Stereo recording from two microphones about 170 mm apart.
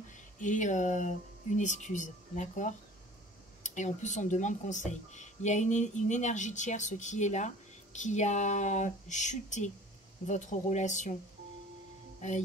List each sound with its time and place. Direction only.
0.4 s speech: 45° left (ahead or behind)
12.2 s speech: 45° left (ahead or behind)